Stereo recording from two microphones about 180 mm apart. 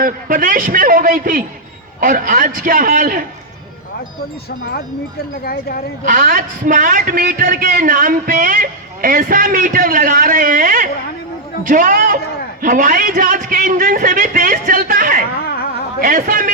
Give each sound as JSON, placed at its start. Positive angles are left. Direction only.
{"t": 0.0, "sound": "a man's voice", "side_deg": -50}
{"t": 5.4, "sound": "speech", "side_deg": 55}
{"t": 6.1, "sound": "a man's voice", "side_deg": -50}